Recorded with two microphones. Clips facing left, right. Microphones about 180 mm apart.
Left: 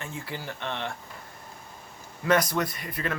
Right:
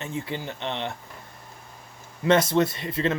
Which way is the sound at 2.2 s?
25° right (ahead or behind).